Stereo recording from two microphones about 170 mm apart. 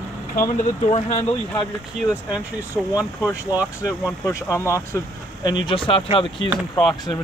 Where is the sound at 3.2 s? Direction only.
20° left (ahead or behind).